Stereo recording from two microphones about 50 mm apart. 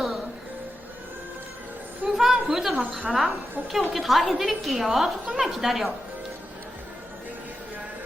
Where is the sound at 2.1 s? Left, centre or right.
Centre.